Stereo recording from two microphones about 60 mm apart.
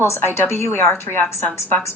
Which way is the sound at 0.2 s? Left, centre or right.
Left.